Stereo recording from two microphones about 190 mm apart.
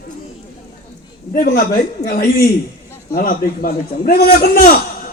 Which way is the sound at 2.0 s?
50° left (ahead or behind).